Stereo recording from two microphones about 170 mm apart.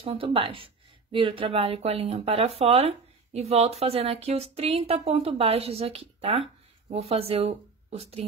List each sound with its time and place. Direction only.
0.0 s speech: 35° right (ahead or behind)